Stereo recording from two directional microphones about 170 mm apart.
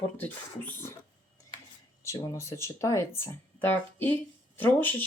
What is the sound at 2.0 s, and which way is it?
Speech, 15° left (ahead or behind).